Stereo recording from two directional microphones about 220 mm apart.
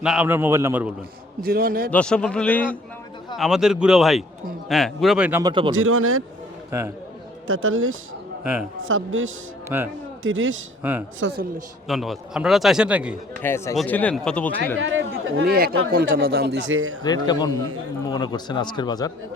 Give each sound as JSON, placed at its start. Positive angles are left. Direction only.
{"t": 0.0, "sound": "a man's voice", "side_deg": -5}
{"t": 1.4, "sound": "a man's voice", "side_deg": -40}
{"t": 1.9, "sound": "a man's voice", "side_deg": 5}
{"t": 5.4, "sound": "speech", "side_deg": -20}
{"t": 5.7, "sound": "speech", "side_deg": -65}
{"t": 6.7, "sound": "a man's voice", "side_deg": -10}
{"t": 7.4, "sound": "speech", "side_deg": -65}
{"t": 9.6, "sound": "a man's voice", "side_deg": -10}
{"t": 10.2, "sound": "speech", "side_deg": -60}
{"t": 11.9, "sound": "a man's voice", "side_deg": 0}
{"t": 13.4, "sound": "a man's voice", "side_deg": 10}
{"t": 14.8, "sound": "speech", "side_deg": -60}
{"t": 17.0, "sound": "a man's voice", "side_deg": 20}